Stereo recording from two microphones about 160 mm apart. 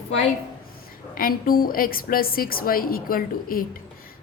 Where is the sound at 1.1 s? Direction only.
60° left (ahead or behind).